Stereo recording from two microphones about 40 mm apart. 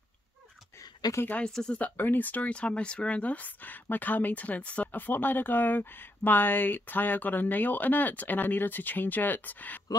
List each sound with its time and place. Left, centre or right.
1.4 s speech: centre
1.8 s speech: left
4.9 s speech: left